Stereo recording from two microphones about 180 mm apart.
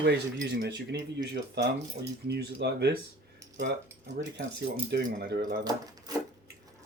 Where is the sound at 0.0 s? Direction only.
70° right (ahead or behind).